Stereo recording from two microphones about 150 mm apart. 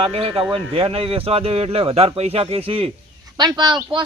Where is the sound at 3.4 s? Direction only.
30° right (ahead or behind).